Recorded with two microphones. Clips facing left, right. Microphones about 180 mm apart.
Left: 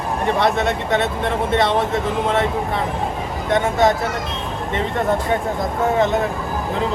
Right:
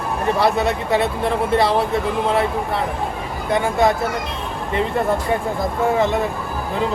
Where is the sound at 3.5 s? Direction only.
Centre (ahead or behind).